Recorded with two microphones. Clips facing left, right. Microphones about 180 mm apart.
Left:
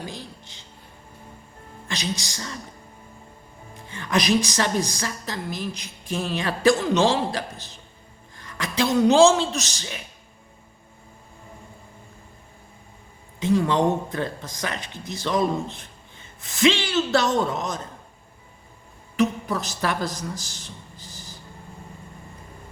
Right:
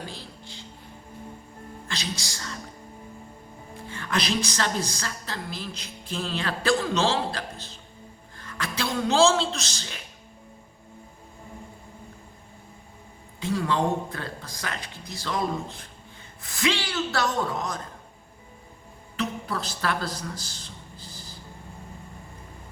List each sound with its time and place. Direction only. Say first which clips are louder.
0.0 s a sound: left 3 dB; 15° left (ahead or behind)
1.9 s speech: left 5 dB; 20° left (ahead or behind)
3.8 s a woman's voice: left 5 dB; 20° left (ahead or behind)
13.4 s speech: left 5 dB; 20° left (ahead or behind)
19.1 s a woman's voice: left 7 dB; 15° left (ahead or behind)
20.6 s a sound: left 2 dB; 20° left (ahead or behind)